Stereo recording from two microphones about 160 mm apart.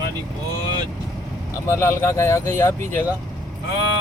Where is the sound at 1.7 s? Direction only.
15° left (ahead or behind).